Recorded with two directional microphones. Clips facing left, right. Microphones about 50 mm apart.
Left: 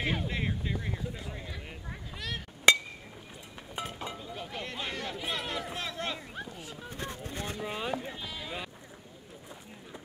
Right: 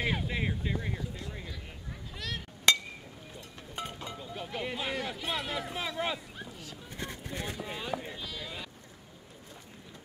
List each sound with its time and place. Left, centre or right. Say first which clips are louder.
0.0 s speech: even; centre
2.1 s a sound: even; centre
2.7 s chink: left 4 dB; centre
3.7 s a sound: left 2 dB; centre
4.2 s speech: right 2 dB; centre
6.6 s speech: left 3 dB; left
7.0 s a sound: even; left
7.3 s speech: right 1 dB; centre
7.6 s speech: left 2 dB; centre